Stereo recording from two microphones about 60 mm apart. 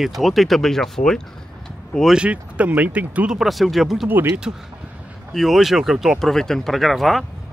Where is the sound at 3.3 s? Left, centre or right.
Centre.